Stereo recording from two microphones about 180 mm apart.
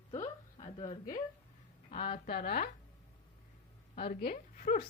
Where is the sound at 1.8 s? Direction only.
50° left (ahead or behind).